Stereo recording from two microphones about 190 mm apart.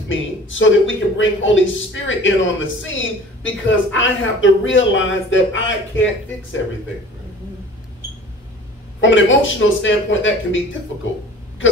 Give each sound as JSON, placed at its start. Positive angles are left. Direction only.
{"t": 0.1, "sound": "a man's voice", "side_deg": 85}
{"t": 9.0, "sound": "a man's voice", "side_deg": 80}